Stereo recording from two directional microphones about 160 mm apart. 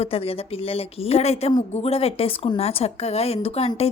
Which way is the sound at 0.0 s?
40° left (ahead or behind).